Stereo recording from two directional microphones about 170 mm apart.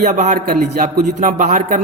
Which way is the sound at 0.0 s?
45° right (ahead or behind).